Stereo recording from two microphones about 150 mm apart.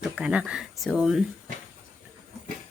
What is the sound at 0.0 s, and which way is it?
Speech, 10° right (ahead or behind).